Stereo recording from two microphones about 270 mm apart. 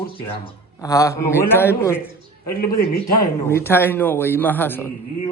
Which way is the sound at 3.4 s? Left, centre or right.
Centre.